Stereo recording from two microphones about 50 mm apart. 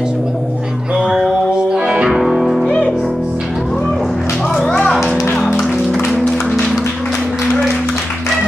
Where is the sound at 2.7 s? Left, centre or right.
Left.